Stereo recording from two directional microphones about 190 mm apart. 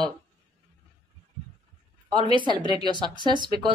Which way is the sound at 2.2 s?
25° right (ahead or behind).